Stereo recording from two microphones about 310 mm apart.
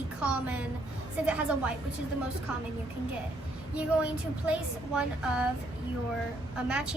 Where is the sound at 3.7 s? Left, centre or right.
Centre.